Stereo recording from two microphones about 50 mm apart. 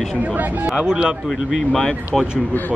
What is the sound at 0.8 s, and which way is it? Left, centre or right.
Speech, centre.